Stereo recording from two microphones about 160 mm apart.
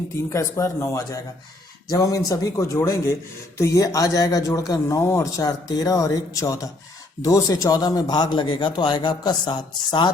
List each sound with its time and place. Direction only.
0.3 s speech: 20° left (ahead or behind)